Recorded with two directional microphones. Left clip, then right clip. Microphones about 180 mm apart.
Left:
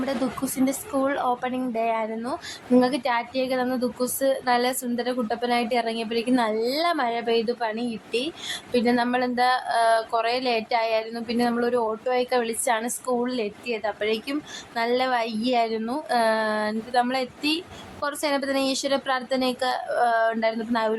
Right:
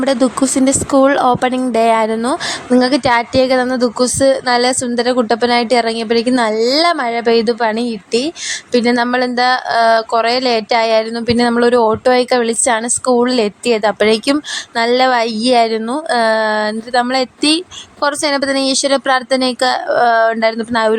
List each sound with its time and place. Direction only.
0.0 s speech: 40° right (ahead or behind)